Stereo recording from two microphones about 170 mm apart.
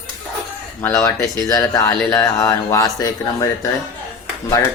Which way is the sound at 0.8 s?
15° left (ahead or behind).